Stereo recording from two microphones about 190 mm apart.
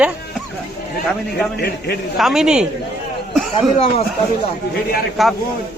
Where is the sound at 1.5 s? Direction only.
60° left (ahead or behind).